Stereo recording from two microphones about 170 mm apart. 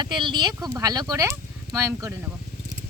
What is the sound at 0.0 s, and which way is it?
Speech, 25° right (ahead or behind).